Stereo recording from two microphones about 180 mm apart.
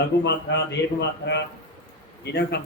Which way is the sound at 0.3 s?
70° left (ahead or behind).